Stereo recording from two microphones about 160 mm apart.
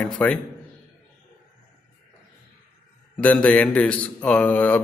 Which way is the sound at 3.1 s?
10° left (ahead or behind).